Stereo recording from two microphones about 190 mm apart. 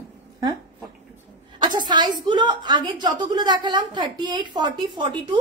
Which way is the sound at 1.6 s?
25° right (ahead or behind).